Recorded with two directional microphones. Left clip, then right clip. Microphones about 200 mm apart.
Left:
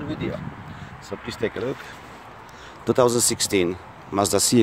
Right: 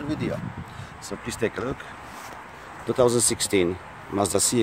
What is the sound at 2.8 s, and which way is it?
Speech, 30° left (ahead or behind).